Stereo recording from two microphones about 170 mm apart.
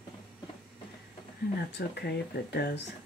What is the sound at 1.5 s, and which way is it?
Speech, 70° left (ahead or behind).